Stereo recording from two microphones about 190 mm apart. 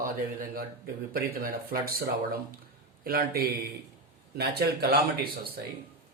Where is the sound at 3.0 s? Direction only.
55° right (ahead or behind).